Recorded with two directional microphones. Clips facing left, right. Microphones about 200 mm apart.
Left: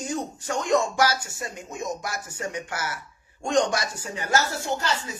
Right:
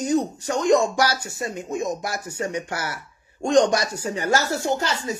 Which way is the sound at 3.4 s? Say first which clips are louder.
Right 5 dB; 40° right (ahead or behind).